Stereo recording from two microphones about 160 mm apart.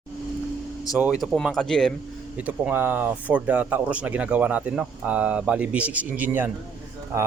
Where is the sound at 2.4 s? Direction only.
10° right (ahead or behind).